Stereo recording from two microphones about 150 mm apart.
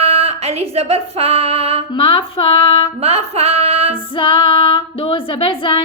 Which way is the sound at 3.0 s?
45° right (ahead or behind).